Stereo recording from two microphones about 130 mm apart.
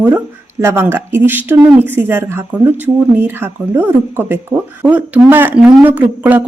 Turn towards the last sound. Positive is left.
turn(degrees=-15)  # may be behind; listen again after turning